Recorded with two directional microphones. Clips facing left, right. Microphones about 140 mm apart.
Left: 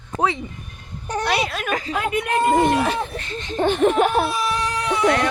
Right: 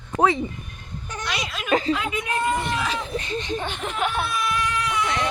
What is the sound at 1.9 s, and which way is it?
Speech, 50° left (ahead or behind).